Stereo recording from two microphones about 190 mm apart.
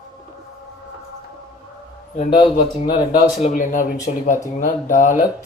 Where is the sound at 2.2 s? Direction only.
30° left (ahead or behind).